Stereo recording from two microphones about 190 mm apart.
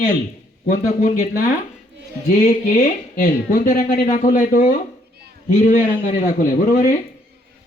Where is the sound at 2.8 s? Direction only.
45° left (ahead or behind).